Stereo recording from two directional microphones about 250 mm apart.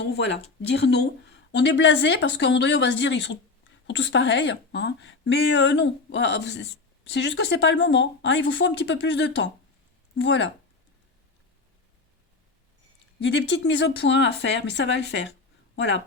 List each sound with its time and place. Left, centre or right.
0.0 s speech: left
13.2 s speech: left